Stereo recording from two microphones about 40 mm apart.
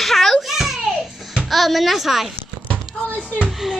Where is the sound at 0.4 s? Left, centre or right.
Centre.